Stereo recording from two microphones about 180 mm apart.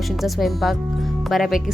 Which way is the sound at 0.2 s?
Centre (ahead or behind).